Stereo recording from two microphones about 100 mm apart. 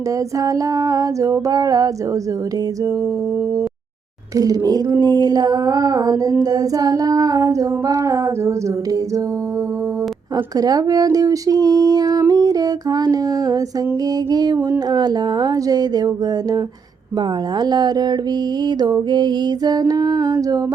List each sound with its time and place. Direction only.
0.3 s female singing: 35° right (ahead or behind)
4.4 s female singing: 35° right (ahead or behind)
10.3 s female singing: 40° right (ahead or behind)
14.3 s speech: 45° right (ahead or behind)